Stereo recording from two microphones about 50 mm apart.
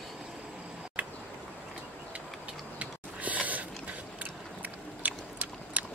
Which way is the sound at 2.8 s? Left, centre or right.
Right.